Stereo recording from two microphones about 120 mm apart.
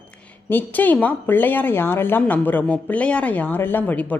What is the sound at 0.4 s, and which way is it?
A woman's voice, 15° left (ahead or behind).